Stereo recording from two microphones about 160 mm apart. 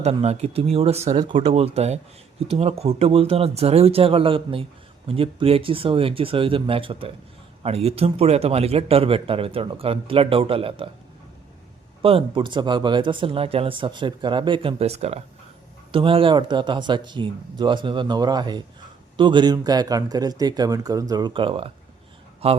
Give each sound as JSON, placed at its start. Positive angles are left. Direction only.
{"t": 0.0, "sound": "a man's voice", "side_deg": -40}
{"t": 12.0, "sound": "a man's voice", "side_deg": -35}